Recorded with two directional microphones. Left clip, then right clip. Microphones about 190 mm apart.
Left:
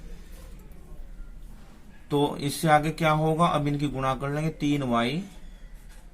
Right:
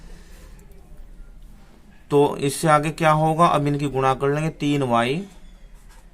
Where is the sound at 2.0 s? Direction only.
35° right (ahead or behind).